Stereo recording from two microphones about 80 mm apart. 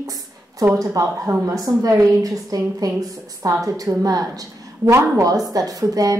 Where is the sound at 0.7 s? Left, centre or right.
Right.